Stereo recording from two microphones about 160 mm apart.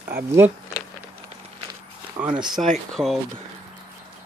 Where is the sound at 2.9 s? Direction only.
Centre (ahead or behind).